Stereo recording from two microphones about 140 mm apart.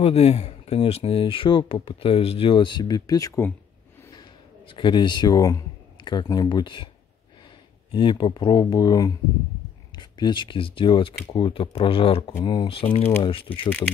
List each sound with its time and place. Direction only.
0.0 s speech: 45° left (ahead or behind)
7.9 s speech: 35° left (ahead or behind)
13.5 s speech: 10° left (ahead or behind)